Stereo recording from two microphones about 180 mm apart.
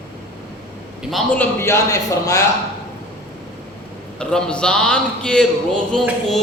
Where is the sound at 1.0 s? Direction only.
Centre (ahead or behind).